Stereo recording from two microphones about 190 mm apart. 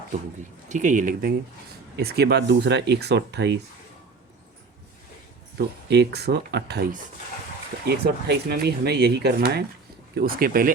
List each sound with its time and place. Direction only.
0.7 s speech: 40° right (ahead or behind)
2.0 s speech: 55° right (ahead or behind)
5.5 s speech: 60° right (ahead or behind)